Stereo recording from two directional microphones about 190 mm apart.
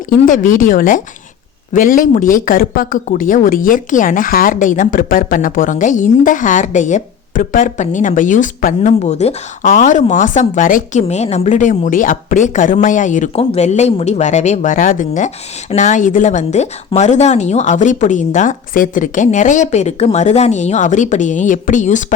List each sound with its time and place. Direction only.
0.3 s a woman's voice: 45° left (ahead or behind)